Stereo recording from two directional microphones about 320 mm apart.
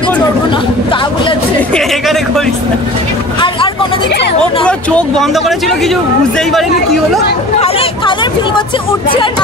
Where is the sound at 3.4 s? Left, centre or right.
Centre.